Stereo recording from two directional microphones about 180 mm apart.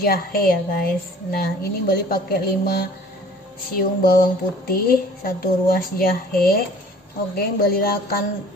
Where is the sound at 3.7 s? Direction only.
55° left (ahead or behind).